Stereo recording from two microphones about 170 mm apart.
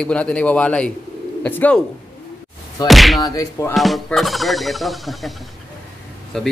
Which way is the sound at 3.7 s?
Centre (ahead or behind).